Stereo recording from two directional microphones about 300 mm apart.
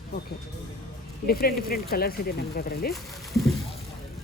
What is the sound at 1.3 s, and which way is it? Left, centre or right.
Speech, left.